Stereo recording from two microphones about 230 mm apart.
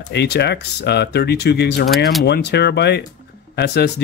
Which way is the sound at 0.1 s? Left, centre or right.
Left.